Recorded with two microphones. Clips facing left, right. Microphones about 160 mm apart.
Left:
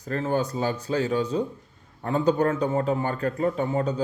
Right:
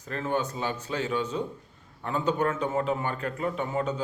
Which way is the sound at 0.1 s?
35° left (ahead or behind).